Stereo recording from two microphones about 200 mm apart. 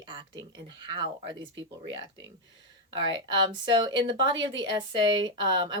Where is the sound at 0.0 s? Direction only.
25° right (ahead or behind).